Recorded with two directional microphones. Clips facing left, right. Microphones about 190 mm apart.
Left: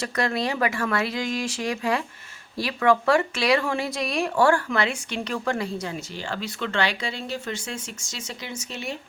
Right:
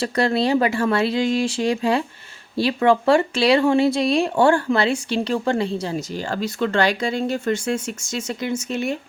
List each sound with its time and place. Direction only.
0.0 s speech: 30° right (ahead or behind)
6.1 s speech: 45° right (ahead or behind)